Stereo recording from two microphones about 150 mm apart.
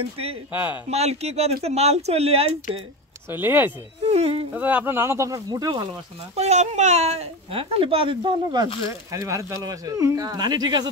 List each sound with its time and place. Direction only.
0.5 s speech: 10° right (ahead or behind)
0.8 s speech: 45° right (ahead or behind)
3.3 s speech: 15° right (ahead or behind)
4.0 s speech: 40° right (ahead or behind)
4.6 s speech: 10° right (ahead or behind); by 5.9 s 25° right (ahead or behind)
6.3 s speech: 45° right (ahead or behind); by 10.9 s 30° right (ahead or behind)